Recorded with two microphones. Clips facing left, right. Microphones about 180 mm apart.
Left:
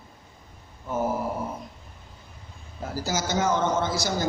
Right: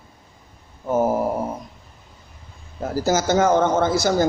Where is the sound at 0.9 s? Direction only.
45° right (ahead or behind).